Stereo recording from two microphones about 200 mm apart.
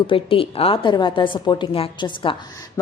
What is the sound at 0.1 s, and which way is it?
A woman's voice, 25° left (ahead or behind).